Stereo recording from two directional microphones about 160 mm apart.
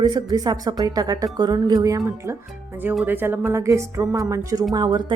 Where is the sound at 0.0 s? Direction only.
25° right (ahead or behind).